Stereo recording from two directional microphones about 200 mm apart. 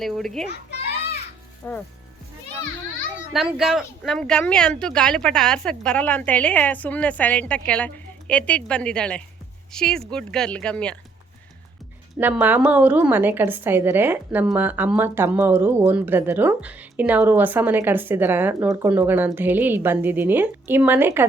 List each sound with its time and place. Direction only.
0.0 s speech: centre (ahead or behind)
0.5 s children playing: 55° left (ahead or behind)
1.6 s speech: 10° left (ahead or behind)
3.3 s speech: centre (ahead or behind)
12.2 s a woman's voice: 10° right (ahead or behind)